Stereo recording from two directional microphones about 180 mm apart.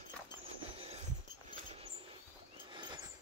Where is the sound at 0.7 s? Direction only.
35° right (ahead or behind).